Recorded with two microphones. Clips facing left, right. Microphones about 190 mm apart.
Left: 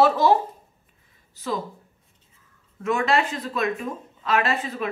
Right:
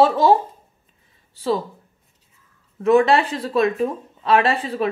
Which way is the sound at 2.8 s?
35° right (ahead or behind).